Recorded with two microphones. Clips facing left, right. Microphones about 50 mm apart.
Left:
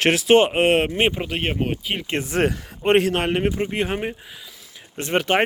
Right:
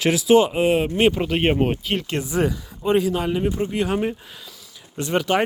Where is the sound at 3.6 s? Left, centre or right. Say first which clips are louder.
Right 2 dB; left.